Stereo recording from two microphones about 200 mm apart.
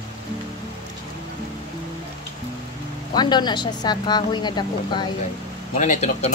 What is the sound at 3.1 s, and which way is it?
Speech, 20° left (ahead or behind).